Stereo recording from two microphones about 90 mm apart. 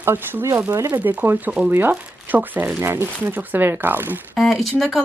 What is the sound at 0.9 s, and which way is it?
Speech, 20° right (ahead or behind).